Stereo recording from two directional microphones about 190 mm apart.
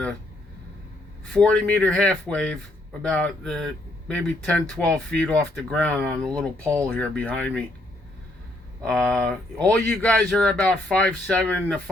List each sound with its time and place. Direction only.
1.3 s speech: 5° left (ahead or behind)
8.8 s speech: 5° left (ahead or behind)